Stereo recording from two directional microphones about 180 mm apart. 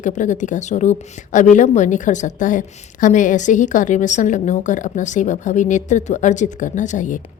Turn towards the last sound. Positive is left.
turn(degrees=45)  # may be behind; listen again after turning